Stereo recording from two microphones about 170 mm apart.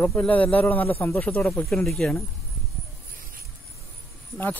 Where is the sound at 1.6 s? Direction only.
Centre (ahead or behind).